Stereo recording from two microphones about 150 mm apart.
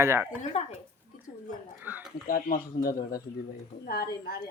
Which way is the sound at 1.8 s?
10° right (ahead or behind).